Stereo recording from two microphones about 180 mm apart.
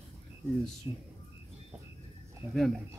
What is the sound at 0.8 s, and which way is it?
Speech, 15° right (ahead or behind).